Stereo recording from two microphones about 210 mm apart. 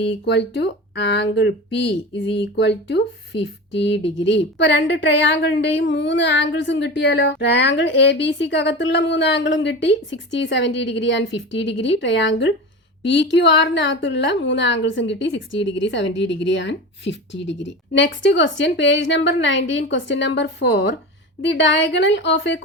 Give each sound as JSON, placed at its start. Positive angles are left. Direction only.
{"t": 0.3, "sound": "a woman's voice", "side_deg": 55}